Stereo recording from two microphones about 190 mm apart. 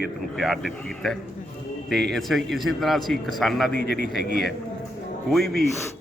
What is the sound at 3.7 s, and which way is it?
Speech, 60° left (ahead or behind).